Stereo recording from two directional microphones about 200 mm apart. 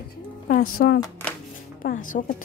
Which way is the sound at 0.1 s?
45° left (ahead or behind).